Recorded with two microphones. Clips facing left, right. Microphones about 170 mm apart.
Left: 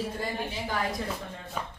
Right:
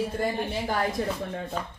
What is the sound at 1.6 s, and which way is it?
Speech, 10° left (ahead or behind).